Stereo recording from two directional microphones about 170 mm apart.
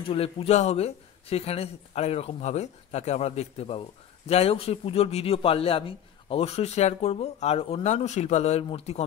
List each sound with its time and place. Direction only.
0.0 s a man's voice: 35° left (ahead or behind)